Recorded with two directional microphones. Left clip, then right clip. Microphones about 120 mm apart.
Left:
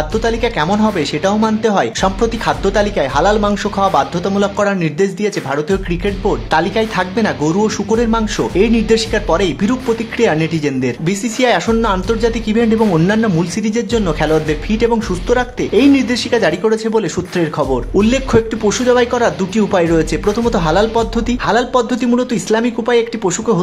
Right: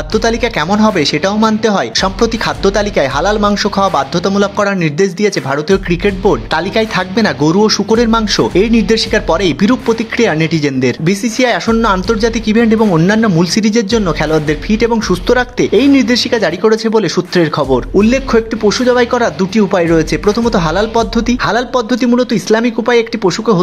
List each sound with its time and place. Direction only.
0.1 s a man's voice: 25° right (ahead or behind)
7.4 s a man's voice: 15° right (ahead or behind)
8.1 s a man's voice: 30° right (ahead or behind)
12.9 s a man's voice: 15° right (ahead or behind)
13.2 s speech: 30° right (ahead or behind)
13.9 s a man's voice: 15° right (ahead or behind); by 17.7 s 30° right (ahead or behind)
17.9 s a man's voice: 15° right (ahead or behind)